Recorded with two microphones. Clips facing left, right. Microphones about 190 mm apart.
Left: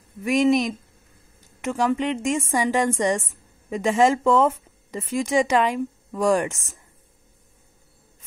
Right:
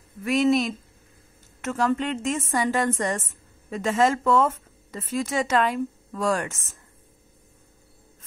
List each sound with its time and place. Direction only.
0.2 s speech: 15° left (ahead or behind)